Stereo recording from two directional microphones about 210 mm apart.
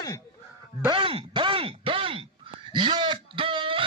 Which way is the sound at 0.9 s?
25° right (ahead or behind).